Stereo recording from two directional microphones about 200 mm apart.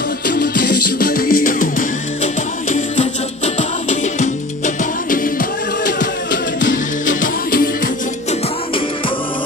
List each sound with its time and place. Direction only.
0.3 s music: 45° left (ahead or behind)
3.9 s music: 40° left (ahead or behind)
6.6 s music: 40° left (ahead or behind)